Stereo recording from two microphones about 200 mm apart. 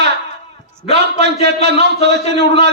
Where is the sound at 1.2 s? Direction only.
60° right (ahead or behind).